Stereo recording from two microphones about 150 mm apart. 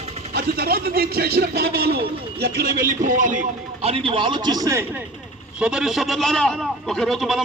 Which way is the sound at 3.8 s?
40° right (ahead or behind).